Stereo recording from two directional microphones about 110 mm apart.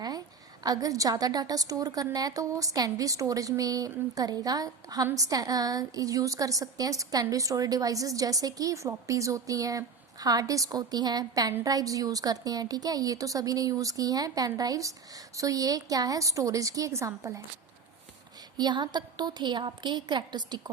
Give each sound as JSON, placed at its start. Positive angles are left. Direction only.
{"t": 0.6, "sound": "a woman's voice", "side_deg": -35}
{"t": 18.5, "sound": "a woman's voice", "side_deg": -40}